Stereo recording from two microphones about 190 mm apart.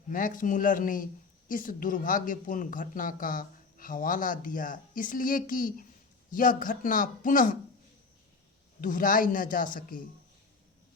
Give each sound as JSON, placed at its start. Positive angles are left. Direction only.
{"t": 0.1, "sound": "speech", "side_deg": 45}
{"t": 8.8, "sound": "speech", "side_deg": 45}